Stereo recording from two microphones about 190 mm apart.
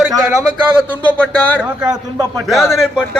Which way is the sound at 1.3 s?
5° left (ahead or behind).